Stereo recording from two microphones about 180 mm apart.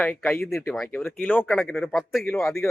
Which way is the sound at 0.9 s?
10° left (ahead or behind).